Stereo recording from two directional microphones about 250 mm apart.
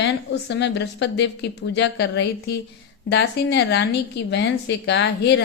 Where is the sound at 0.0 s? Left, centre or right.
Left.